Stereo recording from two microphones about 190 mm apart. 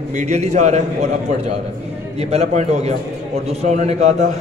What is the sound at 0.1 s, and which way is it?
A man's voice, 40° right (ahead or behind).